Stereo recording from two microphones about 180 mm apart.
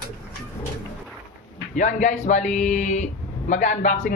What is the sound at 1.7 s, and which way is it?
Speech, 40° left (ahead or behind).